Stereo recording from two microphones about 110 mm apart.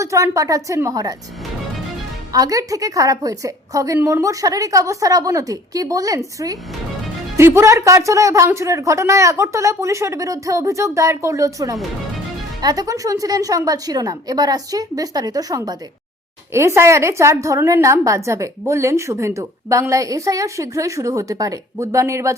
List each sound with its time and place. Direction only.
0.0 s a woman's voice: 30° right (ahead or behind)
2.3 s a woman's voice: 35° right (ahead or behind)
16.5 s a woman's voice: 25° right (ahead or behind)